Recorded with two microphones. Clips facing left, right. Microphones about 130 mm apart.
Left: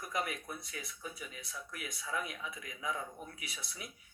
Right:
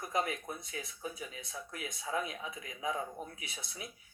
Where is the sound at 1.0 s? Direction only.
40° right (ahead or behind).